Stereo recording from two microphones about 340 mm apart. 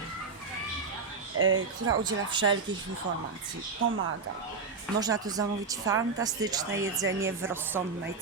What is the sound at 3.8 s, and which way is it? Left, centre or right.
Speech, right.